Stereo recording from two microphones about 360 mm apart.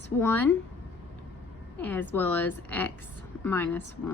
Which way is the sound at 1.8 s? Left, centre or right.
Centre.